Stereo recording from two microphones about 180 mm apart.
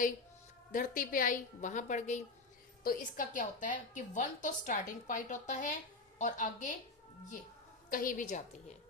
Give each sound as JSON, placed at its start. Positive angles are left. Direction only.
{"t": 0.7, "sound": "a woman's voice", "side_deg": 50}
{"t": 7.9, "sound": "a woman's voice", "side_deg": 50}